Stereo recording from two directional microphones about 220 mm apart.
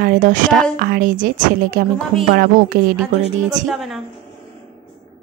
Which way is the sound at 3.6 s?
Centre (ahead or behind).